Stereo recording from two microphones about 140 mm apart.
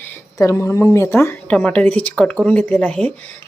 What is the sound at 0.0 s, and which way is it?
Speech, 20° left (ahead or behind).